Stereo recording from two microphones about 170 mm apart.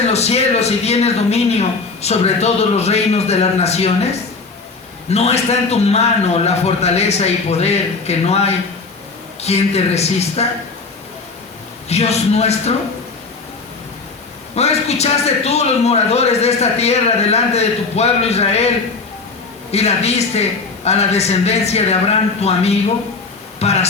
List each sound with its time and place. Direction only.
0.1 s a man's voice: 40° left (ahead or behind)
11.9 s a man's voice: 40° left (ahead or behind)
14.5 s a man's voice: 40° left (ahead or behind)
19.7 s a man's voice: 40° left (ahead or behind)